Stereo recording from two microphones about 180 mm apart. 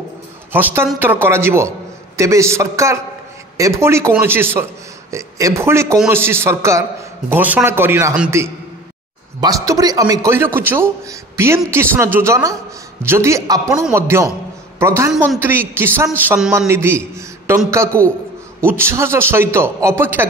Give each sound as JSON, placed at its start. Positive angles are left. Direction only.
{"t": 0.5, "sound": "a man's voice", "side_deg": -10}